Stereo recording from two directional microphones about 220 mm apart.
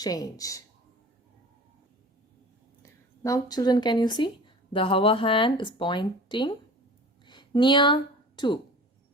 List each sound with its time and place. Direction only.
0.0 s speech: 15° left (ahead or behind)
3.2 s speech: 15° left (ahead or behind)
7.3 s a sound: 20° left (ahead or behind)